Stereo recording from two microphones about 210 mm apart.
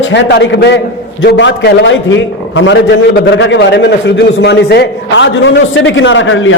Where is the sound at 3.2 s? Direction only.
55° left (ahead or behind).